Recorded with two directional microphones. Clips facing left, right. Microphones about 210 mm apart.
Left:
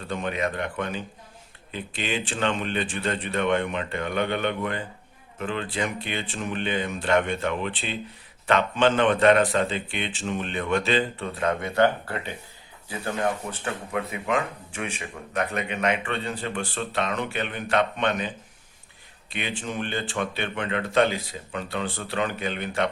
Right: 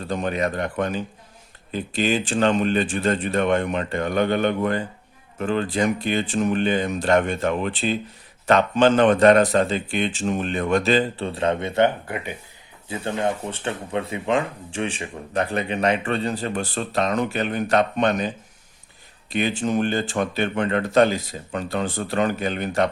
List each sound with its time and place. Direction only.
0.1 s speech: 40° right (ahead or behind)
19.3 s speech: 40° right (ahead or behind)